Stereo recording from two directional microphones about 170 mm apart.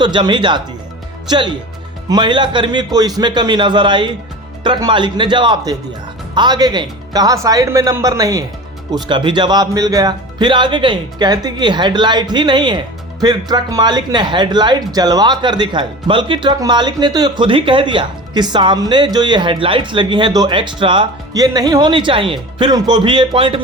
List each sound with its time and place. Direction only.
0.0 s speech: 25° right (ahead or behind)
2.0 s speech: 25° right (ahead or behind)